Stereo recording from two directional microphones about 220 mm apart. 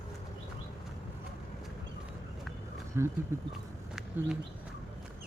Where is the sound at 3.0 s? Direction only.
10° right (ahead or behind).